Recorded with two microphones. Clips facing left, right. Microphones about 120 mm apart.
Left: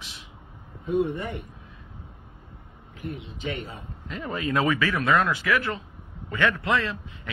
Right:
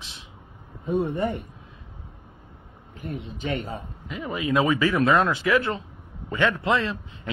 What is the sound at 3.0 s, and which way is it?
Speech, 45° right (ahead or behind).